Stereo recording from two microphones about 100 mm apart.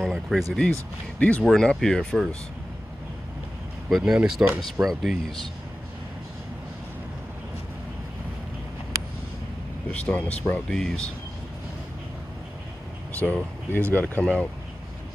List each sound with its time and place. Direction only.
0.0 s speech: centre (ahead or behind)
3.9 s speech: 5° right (ahead or behind)
4.4 s speech: 15° right (ahead or behind)
4.8 s speech: centre (ahead or behind)
9.8 s speech: 10° left (ahead or behind)
13.1 s speech: 15° left (ahead or behind)